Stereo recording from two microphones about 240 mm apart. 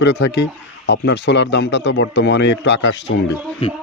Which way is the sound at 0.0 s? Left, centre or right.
Left.